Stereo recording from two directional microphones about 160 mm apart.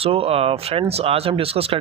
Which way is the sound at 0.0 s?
35° right (ahead or behind).